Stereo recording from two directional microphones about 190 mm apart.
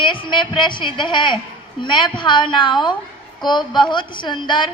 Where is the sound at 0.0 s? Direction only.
25° left (ahead or behind).